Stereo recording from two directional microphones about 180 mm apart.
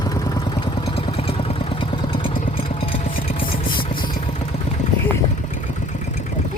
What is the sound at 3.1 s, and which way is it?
Vehicle, 50° left (ahead or behind).